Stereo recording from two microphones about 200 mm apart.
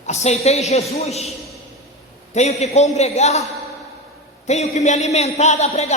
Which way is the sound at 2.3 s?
35° left (ahead or behind).